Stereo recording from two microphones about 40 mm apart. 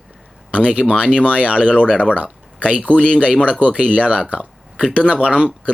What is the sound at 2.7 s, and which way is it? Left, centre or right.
Speech, right.